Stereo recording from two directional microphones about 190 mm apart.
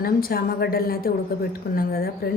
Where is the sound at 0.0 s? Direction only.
50° left (ahead or behind).